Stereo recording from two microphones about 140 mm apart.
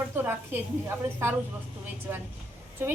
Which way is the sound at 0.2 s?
15° right (ahead or behind).